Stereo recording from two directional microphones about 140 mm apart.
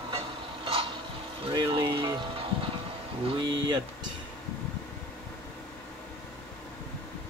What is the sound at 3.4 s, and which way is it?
Speech, 30° right (ahead or behind).